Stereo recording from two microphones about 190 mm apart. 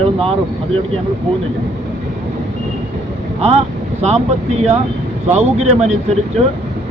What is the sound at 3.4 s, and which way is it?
Speech, 35° right (ahead or behind).